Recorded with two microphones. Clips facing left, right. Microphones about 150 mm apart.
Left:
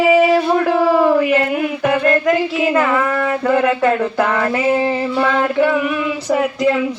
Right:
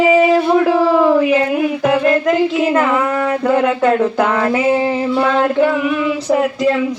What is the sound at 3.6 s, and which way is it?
Female singing, centre (ahead or behind).